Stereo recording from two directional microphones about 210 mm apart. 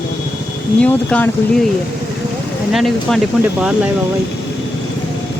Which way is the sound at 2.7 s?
Centre (ahead or behind).